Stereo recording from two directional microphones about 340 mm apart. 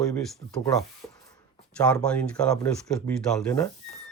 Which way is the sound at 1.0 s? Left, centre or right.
Centre.